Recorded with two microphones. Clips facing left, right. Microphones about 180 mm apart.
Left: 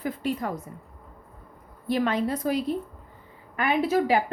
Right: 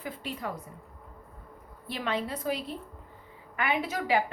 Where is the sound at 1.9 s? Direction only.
45° left (ahead or behind).